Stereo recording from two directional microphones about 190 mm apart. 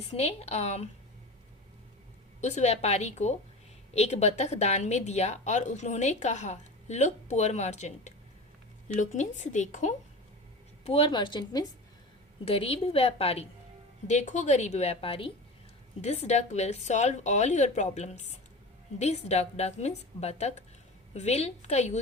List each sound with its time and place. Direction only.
0.1 s a woman's voice: 35° left (ahead or behind)
2.4 s a woman's voice: 35° left (ahead or behind)
9.4 s a woman's voice: 40° left (ahead or behind)